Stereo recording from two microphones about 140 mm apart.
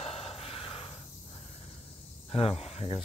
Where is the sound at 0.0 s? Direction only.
45° left (ahead or behind).